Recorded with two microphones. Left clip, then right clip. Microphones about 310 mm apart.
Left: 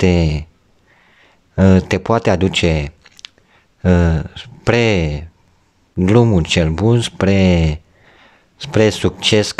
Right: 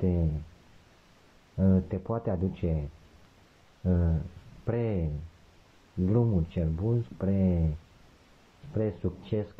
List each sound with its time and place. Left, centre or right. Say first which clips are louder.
1.6 s speech: left 16 dB; left
3.8 s speech: left 17 dB; left
8.7 s speech: left 18 dB; left